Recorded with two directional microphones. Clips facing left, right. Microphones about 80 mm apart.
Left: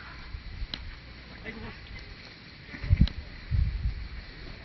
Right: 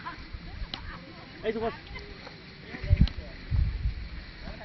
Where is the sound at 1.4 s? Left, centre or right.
Right.